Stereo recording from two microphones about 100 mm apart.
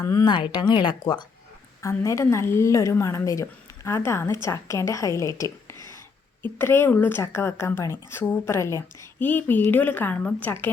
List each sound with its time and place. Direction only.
0.0 s a woman's voice: 35° left (ahead or behind)
0.3 s speech: 50° left (ahead or behind)
1.8 s a woman's voice: 30° left (ahead or behind)
6.4 s a woman's voice: 20° left (ahead or behind)